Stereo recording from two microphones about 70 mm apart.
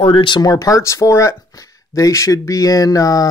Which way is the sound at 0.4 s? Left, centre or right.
Left.